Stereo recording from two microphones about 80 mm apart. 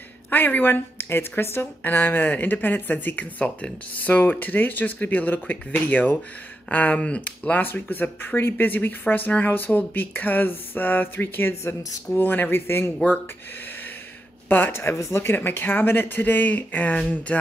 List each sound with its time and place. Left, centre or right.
0.3 s a woman's voice: left
14.5 s a woman's voice: left
17.3 s music: centre